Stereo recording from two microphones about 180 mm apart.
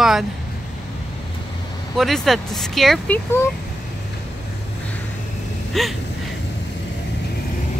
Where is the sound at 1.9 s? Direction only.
Centre (ahead or behind).